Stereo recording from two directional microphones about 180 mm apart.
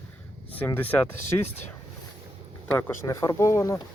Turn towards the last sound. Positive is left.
turn(degrees=15)  # may be behind; listen again after turning